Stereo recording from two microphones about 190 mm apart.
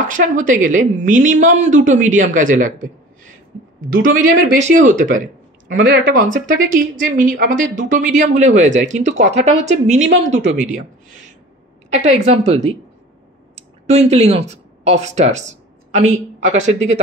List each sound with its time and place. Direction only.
0.1 s a woman's voice: 45° right (ahead or behind)
4.0 s a woman's voice: 45° right (ahead or behind)
11.9 s a woman's voice: 35° right (ahead or behind)
13.8 s speech: 35° right (ahead or behind)